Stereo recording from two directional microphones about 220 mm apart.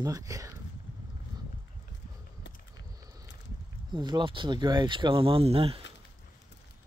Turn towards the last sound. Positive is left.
turn(degrees=-25)  # may be behind; listen again after turning